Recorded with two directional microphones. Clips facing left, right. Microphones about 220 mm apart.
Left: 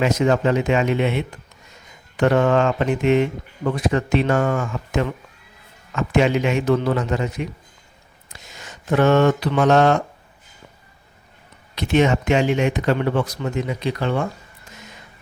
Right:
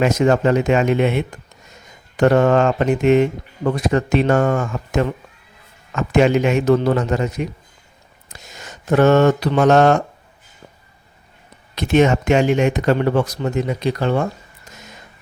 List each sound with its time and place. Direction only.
0.0 s speech: 45° right (ahead or behind)
11.7 s speech: 45° right (ahead or behind)